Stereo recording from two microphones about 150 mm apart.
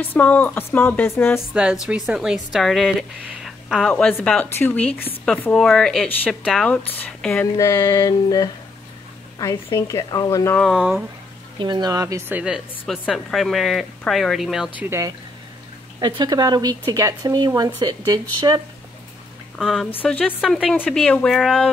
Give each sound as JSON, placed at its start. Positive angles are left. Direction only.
{"t": 0.1, "sound": "speech", "side_deg": 10}
{"t": 1.5, "sound": "speech", "side_deg": -5}
{"t": 3.9, "sound": "speech", "side_deg": 10}
{"t": 7.5, "sound": "a woman's voice", "side_deg": 20}
{"t": 10.6, "sound": "speech", "side_deg": 0}
{"t": 11.6, "sound": "speech", "side_deg": -30}
{"t": 12.4, "sound": "speech", "side_deg": -5}
{"t": 14.8, "sound": "speech", "side_deg": -20}
{"t": 16.0, "sound": "speech", "side_deg": -30}
{"t": 19.6, "sound": "speech", "side_deg": 0}
{"t": 20.0, "sound": "speech", "side_deg": 10}